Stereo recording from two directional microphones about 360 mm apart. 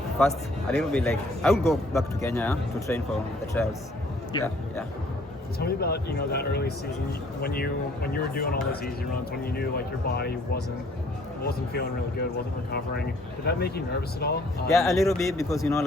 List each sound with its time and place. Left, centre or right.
0.7 s a man's voice: centre
5.5 s speech: left
14.7 s speech: centre